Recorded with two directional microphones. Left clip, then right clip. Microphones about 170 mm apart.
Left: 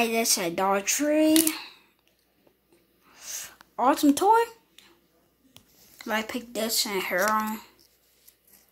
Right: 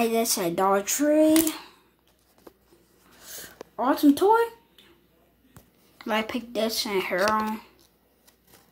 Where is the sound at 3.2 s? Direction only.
30° left (ahead or behind).